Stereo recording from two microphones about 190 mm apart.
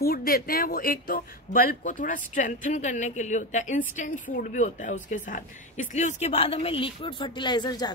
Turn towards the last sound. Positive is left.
turn(degrees=20)  # may be behind; listen again after turning